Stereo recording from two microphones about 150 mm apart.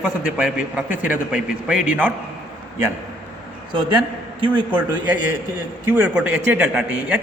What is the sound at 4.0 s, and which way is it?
Speech, 35° right (ahead or behind).